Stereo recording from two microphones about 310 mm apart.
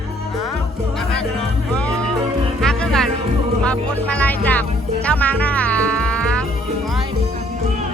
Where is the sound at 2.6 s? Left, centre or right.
Centre.